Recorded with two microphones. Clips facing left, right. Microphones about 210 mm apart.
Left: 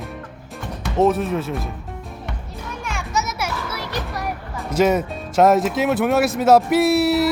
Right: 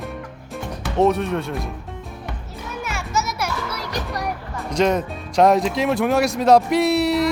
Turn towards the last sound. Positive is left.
turn(degrees=5)  # may be behind; listen again after turning